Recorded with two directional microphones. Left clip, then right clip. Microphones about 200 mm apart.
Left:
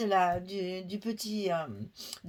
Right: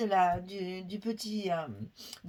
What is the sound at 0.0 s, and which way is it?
Speech, 40° left (ahead or behind).